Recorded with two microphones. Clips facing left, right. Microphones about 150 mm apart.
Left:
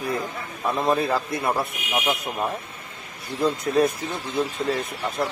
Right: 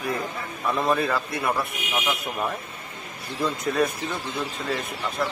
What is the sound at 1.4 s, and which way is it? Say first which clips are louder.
Speech: left 1 dB; 30° left (ahead or behind).